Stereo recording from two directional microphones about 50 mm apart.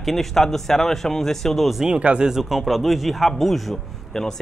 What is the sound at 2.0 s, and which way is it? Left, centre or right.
Speech, right.